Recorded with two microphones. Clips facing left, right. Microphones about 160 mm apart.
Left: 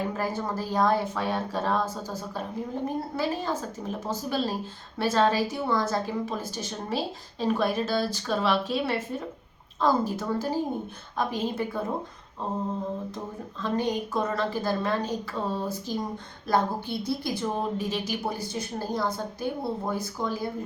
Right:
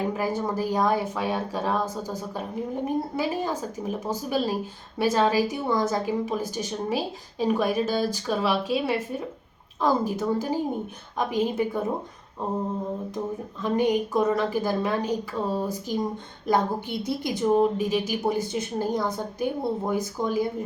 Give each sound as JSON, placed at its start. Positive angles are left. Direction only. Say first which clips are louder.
{"t": 0.2, "sound": "a woman's voice", "louder": "right 3 dB", "side_deg": -15}
{"t": 13.6, "sound": "a woman's voice", "louder": "right 4 dB", "side_deg": -15}